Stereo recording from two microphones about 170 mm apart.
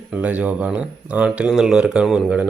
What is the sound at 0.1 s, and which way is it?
Speech, 10° right (ahead or behind).